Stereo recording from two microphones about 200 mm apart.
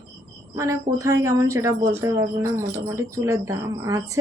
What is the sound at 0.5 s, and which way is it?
A woman's voice, 15° right (ahead or behind).